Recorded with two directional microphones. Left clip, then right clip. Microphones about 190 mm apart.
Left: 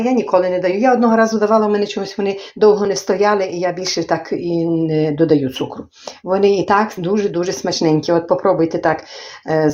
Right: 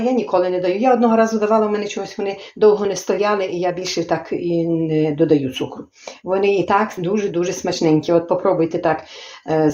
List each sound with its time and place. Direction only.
0.3 s speech: 30° left (ahead or behind)